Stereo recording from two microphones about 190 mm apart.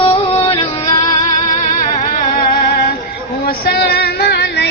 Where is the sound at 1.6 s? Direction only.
40° left (ahead or behind).